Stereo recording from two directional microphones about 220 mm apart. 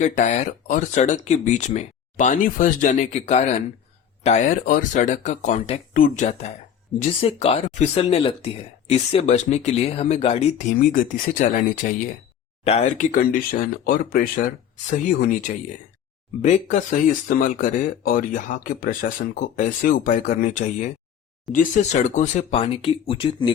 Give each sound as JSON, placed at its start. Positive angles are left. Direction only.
{"t": 0.0, "sound": "speech", "side_deg": 35}